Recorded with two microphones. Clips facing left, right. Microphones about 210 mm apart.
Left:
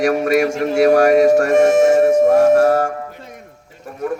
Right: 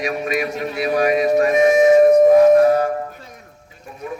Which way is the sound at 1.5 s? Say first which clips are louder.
Left 1 dB; 80° left.